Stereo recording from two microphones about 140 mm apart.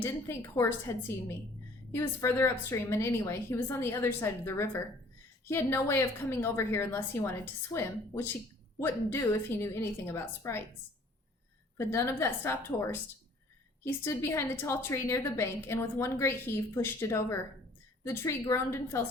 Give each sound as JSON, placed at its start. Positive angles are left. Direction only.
{"t": 0.0, "sound": "a woman's voice", "side_deg": 20}
{"t": 11.8, "sound": "a woman's voice", "side_deg": 20}